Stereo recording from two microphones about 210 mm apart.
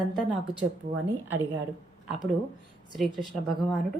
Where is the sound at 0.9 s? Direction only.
70° right (ahead or behind).